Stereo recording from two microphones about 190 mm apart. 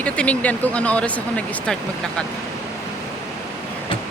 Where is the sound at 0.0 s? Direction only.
5° left (ahead or behind).